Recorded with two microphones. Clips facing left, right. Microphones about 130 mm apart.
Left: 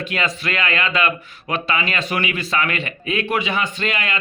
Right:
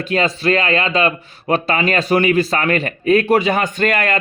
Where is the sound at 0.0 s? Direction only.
35° right (ahead or behind).